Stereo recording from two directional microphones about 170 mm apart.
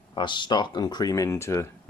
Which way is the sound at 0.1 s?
30° left (ahead or behind).